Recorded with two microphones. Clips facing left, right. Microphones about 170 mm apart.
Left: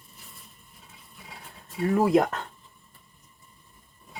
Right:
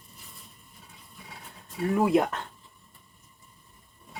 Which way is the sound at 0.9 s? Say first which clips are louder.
Even; centre (ahead or behind).